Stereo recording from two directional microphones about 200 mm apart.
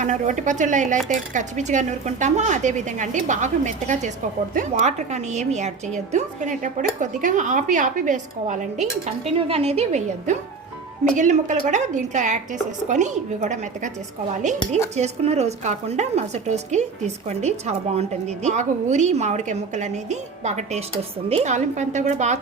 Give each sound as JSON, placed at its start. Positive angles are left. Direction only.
{"t": 0.0, "sound": "a woman's voice", "side_deg": -40}
{"t": 14.9, "sound": "a woman's voice", "side_deg": -35}